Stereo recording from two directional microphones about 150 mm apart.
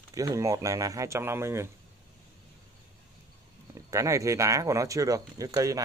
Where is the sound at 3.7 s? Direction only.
20° right (ahead or behind).